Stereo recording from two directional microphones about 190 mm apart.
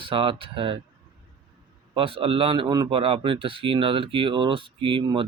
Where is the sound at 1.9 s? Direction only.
30° right (ahead or behind).